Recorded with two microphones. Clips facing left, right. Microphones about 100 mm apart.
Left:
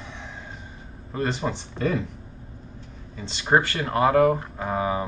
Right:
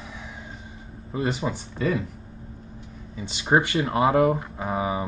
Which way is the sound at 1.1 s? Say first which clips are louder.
Even; 10° right (ahead or behind).